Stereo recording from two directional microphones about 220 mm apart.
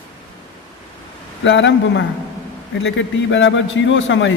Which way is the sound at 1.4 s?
55° left (ahead or behind).